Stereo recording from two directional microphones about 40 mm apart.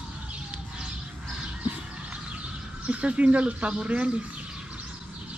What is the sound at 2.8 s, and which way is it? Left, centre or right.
Speech, right.